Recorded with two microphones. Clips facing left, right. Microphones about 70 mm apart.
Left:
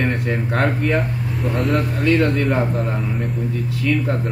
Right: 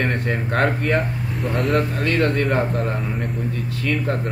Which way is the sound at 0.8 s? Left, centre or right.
Centre.